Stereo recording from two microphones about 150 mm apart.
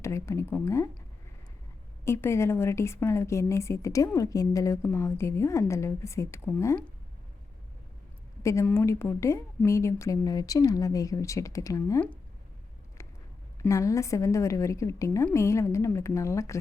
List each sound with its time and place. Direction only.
0.0 s a woman's voice: 20° left (ahead or behind)
2.0 s a woman's voice: 20° left (ahead or behind)
8.4 s a woman's voice: 20° left (ahead or behind)
13.0 s a sound: 20° left (ahead or behind)
13.6 s a woman's voice: 20° left (ahead or behind)